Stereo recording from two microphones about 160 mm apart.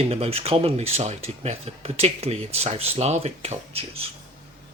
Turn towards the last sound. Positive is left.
turn(degrees=-40)  # may be behind; listen again after turning